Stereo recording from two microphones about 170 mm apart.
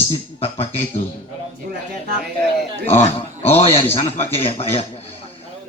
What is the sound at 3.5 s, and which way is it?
Speech, 35° left (ahead or behind).